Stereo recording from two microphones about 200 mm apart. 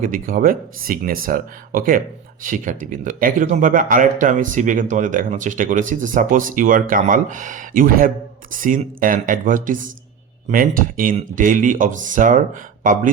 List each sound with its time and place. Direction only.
0.0 s speech: 45° right (ahead or behind)